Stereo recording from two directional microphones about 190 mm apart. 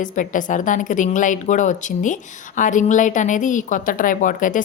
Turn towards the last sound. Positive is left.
turn(degrees=45)  # may be behind; listen again after turning